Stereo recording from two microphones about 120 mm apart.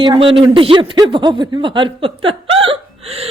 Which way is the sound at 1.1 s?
40° right (ahead or behind).